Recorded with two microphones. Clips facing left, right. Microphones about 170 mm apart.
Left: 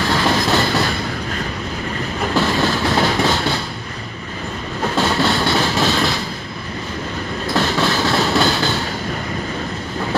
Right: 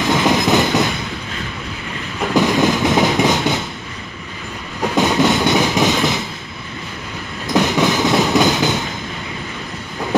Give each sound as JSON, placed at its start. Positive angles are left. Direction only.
{"t": 0.0, "sound": "train", "side_deg": -20}
{"t": 2.3, "sound": "train", "side_deg": -15}
{"t": 4.9, "sound": "train", "side_deg": -15}
{"t": 7.4, "sound": "train", "side_deg": -15}